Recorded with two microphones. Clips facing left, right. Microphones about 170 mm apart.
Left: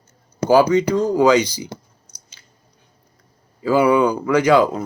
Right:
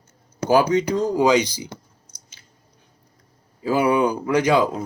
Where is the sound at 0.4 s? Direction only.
20° right (ahead or behind).